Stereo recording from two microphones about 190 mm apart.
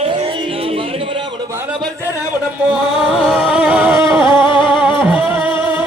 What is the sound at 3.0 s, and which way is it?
Music, centre (ahead or behind).